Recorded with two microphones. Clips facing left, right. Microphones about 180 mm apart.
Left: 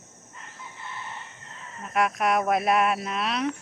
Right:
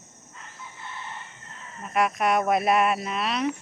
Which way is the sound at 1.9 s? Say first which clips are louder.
Right 1 dB; centre (ahead or behind).